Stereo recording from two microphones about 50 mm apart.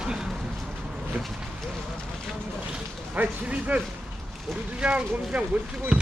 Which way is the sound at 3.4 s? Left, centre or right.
Right.